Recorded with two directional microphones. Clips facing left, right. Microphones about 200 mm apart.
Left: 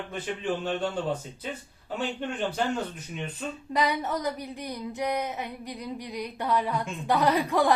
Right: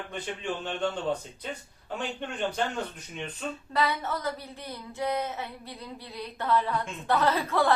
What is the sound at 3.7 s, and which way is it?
Speech, 15° left (ahead or behind).